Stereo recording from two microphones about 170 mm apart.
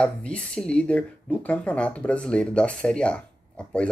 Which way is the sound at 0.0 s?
5° left (ahead or behind).